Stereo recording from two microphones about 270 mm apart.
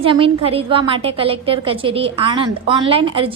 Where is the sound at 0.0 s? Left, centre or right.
Centre.